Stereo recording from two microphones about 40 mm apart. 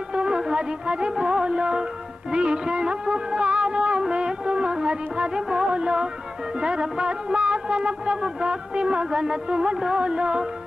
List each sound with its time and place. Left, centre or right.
0.1 s music: right